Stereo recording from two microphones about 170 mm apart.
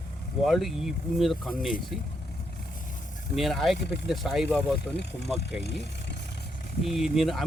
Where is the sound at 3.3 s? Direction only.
Centre (ahead or behind).